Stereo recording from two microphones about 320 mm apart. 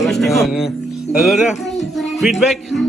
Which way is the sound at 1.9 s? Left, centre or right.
Centre.